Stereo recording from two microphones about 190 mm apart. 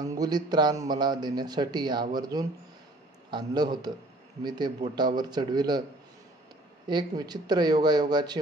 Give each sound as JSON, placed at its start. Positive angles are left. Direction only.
{"t": 0.0, "sound": "a man's voice", "side_deg": -20}
{"t": 6.9, "sound": "a man's voice", "side_deg": -20}